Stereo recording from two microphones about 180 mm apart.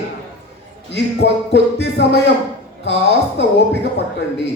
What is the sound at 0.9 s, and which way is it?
A man's voice, 75° left (ahead or behind).